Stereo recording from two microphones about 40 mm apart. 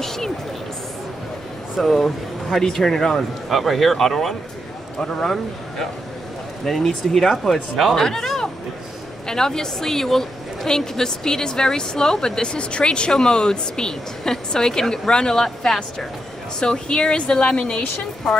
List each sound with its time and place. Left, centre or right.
0.0 s a sound: centre
1.8 s a woman's voice: centre
3.4 s speech: centre
4.9 s a woman's voice: centre
7.5 s speech: centre
7.9 s a woman's voice: centre; by 17.8 s left